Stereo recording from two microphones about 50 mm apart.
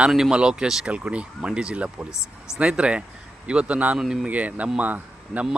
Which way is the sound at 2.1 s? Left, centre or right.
Left.